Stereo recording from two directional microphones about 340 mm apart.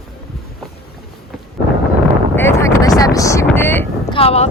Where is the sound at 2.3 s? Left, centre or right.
Centre.